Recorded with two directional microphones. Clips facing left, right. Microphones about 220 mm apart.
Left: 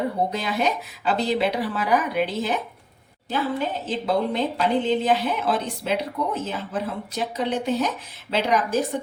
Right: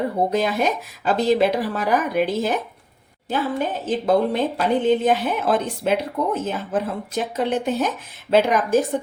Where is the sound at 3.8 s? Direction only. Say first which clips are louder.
Right 6 dB; 50° right (ahead or behind).